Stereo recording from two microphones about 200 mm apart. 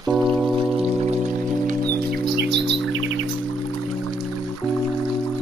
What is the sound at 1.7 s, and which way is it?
Music, 50° right (ahead or behind).